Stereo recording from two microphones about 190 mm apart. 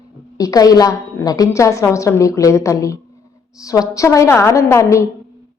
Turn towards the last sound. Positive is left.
turn(degrees=15)  # may be behind; listen again after turning